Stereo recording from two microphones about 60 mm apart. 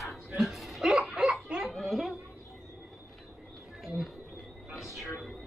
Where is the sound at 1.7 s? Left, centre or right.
Centre.